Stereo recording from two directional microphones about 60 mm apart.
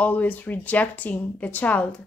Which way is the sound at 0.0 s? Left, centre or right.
Left.